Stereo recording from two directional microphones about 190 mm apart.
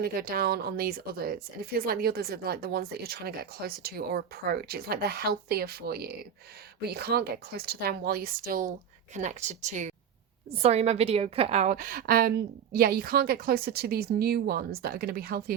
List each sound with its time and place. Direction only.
0.0 s a woman's voice: 50° right (ahead or behind)